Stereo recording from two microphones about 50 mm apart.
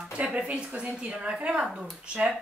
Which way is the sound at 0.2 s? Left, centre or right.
Right.